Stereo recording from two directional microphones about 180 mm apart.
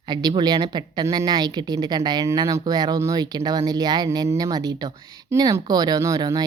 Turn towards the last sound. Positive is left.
turn(degrees=-20)  # may be behind; listen again after turning